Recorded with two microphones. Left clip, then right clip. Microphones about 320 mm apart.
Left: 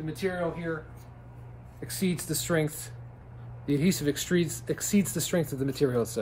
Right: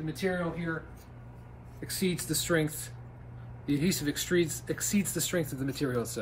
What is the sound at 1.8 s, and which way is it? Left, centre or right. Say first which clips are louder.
Speech: even; centre.